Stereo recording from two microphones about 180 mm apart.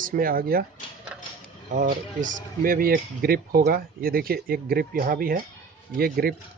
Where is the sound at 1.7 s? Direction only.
45° right (ahead or behind).